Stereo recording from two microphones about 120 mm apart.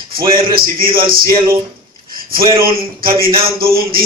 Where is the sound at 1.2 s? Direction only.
25° right (ahead or behind).